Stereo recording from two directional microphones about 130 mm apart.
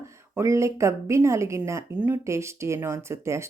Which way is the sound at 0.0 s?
20° right (ahead or behind).